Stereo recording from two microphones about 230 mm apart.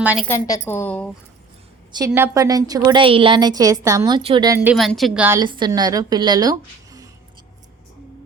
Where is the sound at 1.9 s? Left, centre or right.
Centre.